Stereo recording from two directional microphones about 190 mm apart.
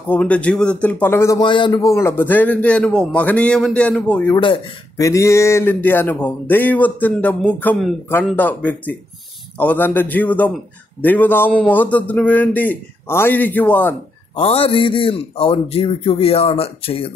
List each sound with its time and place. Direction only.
0.1 s a man's voice: 5° left (ahead or behind)
4.4 s a man's voice: 20° left (ahead or behind)
14.3 s a man's voice: 30° left (ahead or behind)